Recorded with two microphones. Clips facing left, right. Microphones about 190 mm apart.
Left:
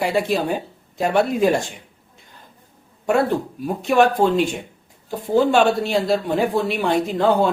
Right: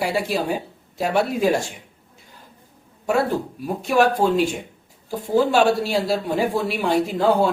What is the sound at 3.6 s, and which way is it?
A man's voice, 5° right (ahead or behind).